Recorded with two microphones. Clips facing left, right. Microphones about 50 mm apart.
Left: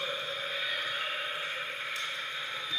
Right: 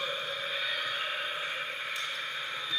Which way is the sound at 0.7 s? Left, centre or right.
Left.